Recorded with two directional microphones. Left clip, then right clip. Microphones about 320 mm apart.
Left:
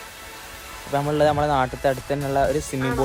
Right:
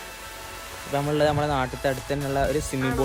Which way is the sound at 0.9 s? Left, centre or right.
Centre.